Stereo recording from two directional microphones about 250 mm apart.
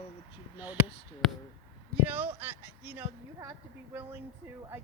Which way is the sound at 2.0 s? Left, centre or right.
Centre.